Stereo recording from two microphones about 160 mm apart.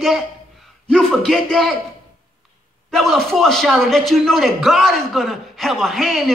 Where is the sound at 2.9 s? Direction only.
Centre (ahead or behind).